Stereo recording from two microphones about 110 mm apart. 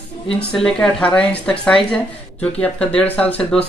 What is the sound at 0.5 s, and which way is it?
Speech, 5° left (ahead or behind).